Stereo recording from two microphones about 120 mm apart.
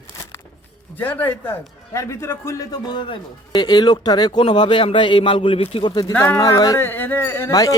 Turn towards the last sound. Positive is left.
turn(degrees=30)  # may be behind; listen again after turning